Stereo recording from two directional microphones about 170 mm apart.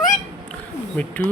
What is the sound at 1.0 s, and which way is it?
Speech, 10° left (ahead or behind).